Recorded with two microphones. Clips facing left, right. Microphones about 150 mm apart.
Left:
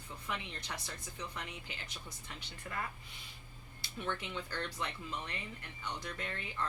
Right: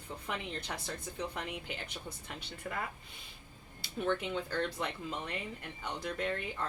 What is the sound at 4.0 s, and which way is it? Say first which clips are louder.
Speech: right 7 dB; 45° right (ahead or behind).